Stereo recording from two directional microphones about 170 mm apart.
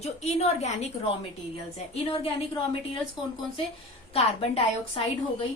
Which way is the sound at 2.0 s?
35° left (ahead or behind).